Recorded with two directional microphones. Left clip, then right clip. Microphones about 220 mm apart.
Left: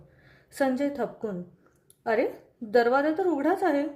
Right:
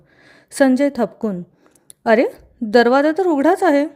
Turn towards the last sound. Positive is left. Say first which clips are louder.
# right 10 dB
turn(degrees=-45)  # may be behind; listen again after turning